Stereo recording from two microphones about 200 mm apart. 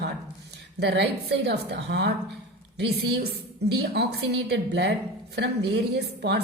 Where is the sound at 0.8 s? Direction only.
55° right (ahead or behind).